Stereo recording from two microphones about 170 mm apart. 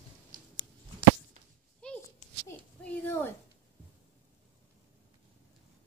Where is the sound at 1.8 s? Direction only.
5° left (ahead or behind).